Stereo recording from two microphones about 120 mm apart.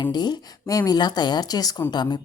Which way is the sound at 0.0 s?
35° left (ahead or behind).